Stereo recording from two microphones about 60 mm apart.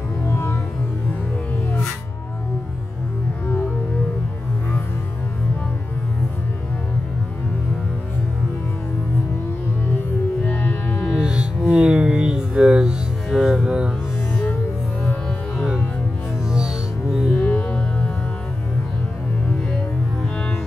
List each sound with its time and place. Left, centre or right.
0.3 s music: left
10.5 s music: left
11.2 s music: centre
16.6 s music: centre
17.3 s music: left